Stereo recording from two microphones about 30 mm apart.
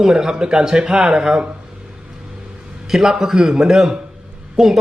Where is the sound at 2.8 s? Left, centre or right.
Centre.